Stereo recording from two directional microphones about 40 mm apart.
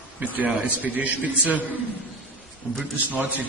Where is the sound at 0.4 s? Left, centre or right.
Right.